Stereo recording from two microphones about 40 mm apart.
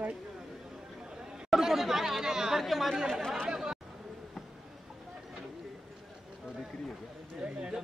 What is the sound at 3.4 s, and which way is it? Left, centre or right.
Chatter, centre.